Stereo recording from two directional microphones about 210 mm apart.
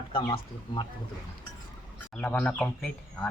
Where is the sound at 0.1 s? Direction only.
25° left (ahead or behind).